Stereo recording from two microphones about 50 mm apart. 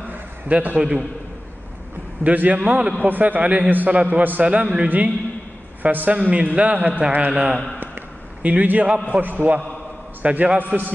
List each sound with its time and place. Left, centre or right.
0.0 s a sound: right
2.2 s a man's voice: right
4.5 s a man's voice: right
4.8 s a man's voice: right